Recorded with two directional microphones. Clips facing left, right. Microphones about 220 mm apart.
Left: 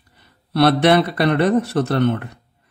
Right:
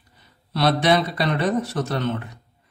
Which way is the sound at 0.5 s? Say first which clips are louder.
Left 5 dB; 60° left (ahead or behind).